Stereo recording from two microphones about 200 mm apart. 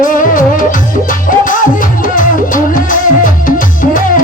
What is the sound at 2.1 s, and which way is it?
Music, 45° left (ahead or behind).